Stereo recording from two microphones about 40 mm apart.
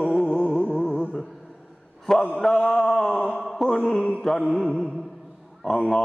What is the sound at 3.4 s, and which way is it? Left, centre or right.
Mantra, centre.